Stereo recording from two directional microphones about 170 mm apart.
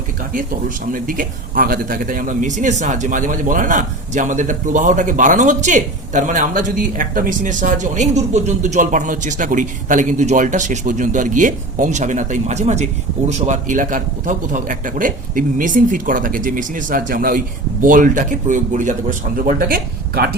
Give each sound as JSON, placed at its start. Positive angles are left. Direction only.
{"t": 0.9, "sound": "a man's voice", "side_deg": -55}
{"t": 19.5, "sound": "speech", "side_deg": -60}